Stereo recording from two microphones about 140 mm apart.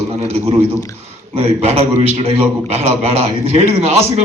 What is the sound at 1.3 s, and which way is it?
A man's voice, 45° right (ahead or behind).